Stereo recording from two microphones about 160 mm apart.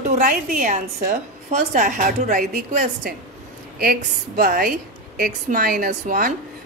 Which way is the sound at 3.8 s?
65° right (ahead or behind).